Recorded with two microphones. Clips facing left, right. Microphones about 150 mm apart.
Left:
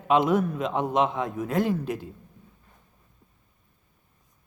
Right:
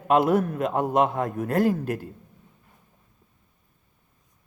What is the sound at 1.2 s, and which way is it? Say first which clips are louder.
Speech: right 2 dB; 55° right (ahead or behind).